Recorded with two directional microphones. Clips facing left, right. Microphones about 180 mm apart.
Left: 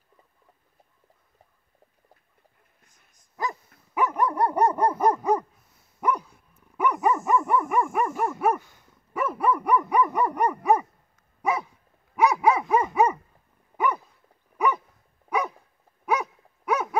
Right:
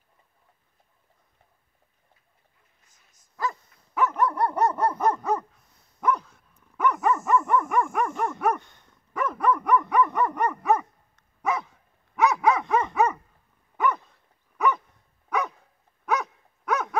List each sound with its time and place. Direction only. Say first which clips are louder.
3.9 s dog: even; 15° left (ahead or behind)